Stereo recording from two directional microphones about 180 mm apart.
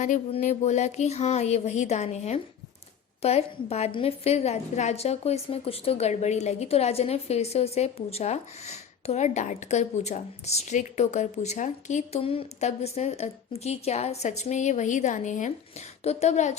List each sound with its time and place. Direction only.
0.0 s a woman's voice: 40° left (ahead or behind)